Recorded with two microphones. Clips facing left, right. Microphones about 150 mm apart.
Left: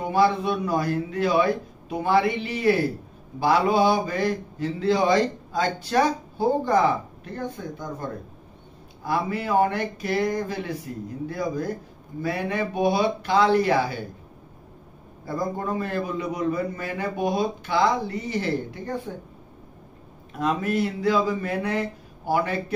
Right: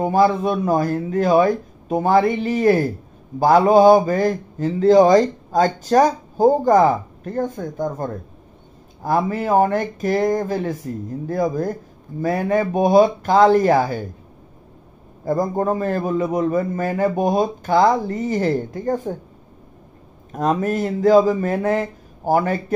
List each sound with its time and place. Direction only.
0.0 s speech: 45° right (ahead or behind)
15.2 s speech: 45° right (ahead or behind)
20.3 s speech: 45° right (ahead or behind)